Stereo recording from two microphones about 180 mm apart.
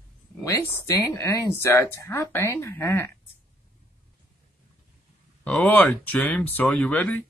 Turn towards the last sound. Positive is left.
turn(degrees=5)  # may be behind; listen again after turning